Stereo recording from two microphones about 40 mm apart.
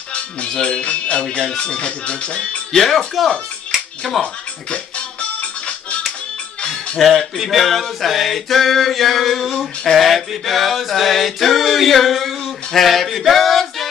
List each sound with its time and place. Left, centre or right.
0.1 s speech: left
2.7 s male singing: centre
4.2 s music: left
7.0 s male singing: centre
9.9 s chant: centre